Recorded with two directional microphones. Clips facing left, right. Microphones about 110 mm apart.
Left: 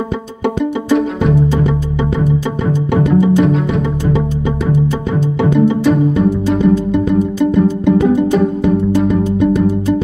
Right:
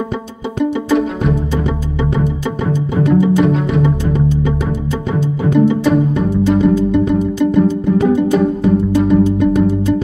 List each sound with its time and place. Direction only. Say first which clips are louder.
0.8 s music: left 4 dB; centre (ahead or behind)
3.3 s music: even; centre (ahead or behind)
5.5 s music: right 1 dB; centre (ahead or behind)